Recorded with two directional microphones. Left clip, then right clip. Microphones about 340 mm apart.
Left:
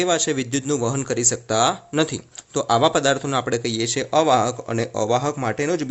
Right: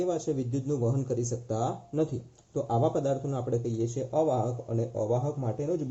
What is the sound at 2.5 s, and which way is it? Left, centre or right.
Speech, left.